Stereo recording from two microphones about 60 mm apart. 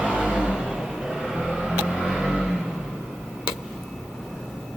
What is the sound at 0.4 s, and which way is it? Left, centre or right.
Vehicle, centre.